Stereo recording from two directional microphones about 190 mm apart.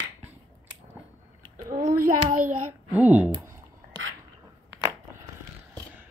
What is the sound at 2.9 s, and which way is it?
Speech, 10° right (ahead or behind).